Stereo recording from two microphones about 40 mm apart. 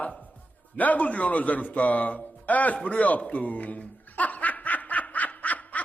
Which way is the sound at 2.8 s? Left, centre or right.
Left.